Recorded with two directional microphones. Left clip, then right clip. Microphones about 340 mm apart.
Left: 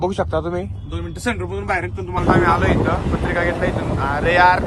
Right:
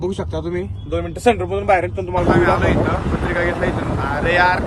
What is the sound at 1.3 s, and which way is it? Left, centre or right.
Speech, right.